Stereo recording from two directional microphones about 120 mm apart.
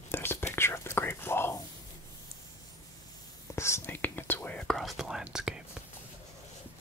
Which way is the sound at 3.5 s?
25° left (ahead or behind).